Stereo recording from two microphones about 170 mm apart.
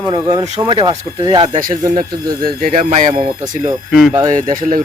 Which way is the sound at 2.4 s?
55° right (ahead or behind).